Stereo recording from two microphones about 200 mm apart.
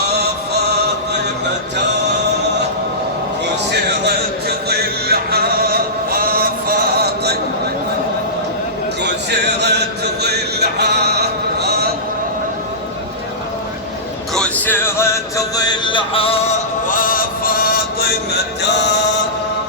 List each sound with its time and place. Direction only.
0.0 s music: 55° right (ahead or behind)
3.7 s music: 55° right (ahead or behind)
9.6 s chant: 55° right (ahead or behind)
14.3 s music: 5° left (ahead or behind); by 19.2 s 60° left (ahead or behind)